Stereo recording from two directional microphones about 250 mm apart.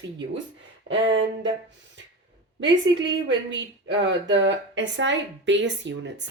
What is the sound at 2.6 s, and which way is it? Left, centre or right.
Speech, right.